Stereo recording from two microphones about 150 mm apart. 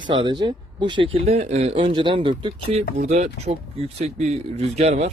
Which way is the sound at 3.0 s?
50° right (ahead or behind).